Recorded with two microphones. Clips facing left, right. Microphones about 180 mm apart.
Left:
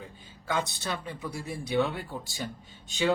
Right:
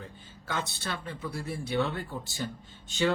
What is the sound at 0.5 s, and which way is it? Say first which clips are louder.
Speech: left 3 dB; 15° left (ahead or behind).